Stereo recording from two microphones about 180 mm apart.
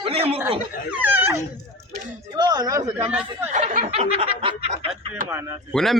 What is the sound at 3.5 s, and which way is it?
Snicker, 45° right (ahead or behind).